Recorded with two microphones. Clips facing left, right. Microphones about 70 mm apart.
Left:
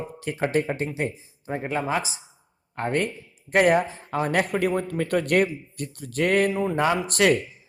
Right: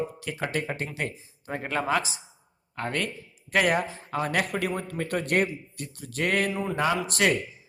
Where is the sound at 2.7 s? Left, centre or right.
Left.